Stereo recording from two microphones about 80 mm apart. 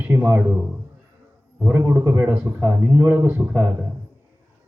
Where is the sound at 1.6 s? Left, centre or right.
Right.